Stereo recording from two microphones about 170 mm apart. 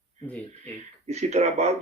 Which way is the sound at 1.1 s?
40° right (ahead or behind).